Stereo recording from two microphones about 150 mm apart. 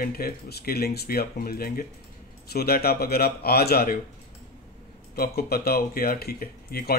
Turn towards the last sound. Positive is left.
turn(degrees=90)